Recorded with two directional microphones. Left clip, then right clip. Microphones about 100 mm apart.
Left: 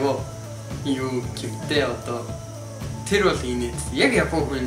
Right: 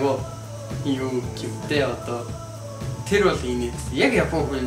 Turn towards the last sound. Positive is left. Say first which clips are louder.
# even
turn(degrees=5)  # may be behind; listen again after turning